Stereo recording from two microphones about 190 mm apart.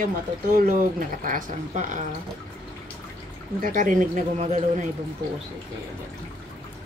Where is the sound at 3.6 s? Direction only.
45° right (ahead or behind).